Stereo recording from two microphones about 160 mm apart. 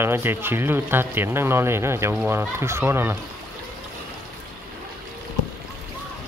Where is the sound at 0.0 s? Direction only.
15° right (ahead or behind).